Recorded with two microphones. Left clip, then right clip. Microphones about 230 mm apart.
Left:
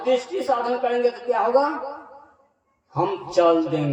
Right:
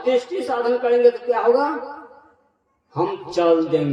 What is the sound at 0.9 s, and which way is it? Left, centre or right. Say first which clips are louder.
Speech: right 5 dB; right.